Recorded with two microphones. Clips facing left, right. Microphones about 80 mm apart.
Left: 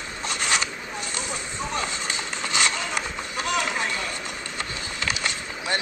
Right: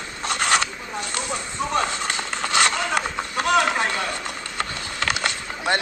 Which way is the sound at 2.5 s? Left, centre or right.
Right.